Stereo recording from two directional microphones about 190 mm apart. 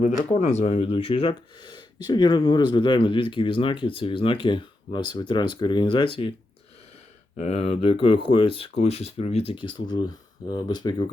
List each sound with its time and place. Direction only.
0.0 s speech: 35° left (ahead or behind)
7.3 s speech: 35° left (ahead or behind)